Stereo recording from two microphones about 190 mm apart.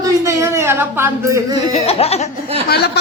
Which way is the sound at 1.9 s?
30° left (ahead or behind).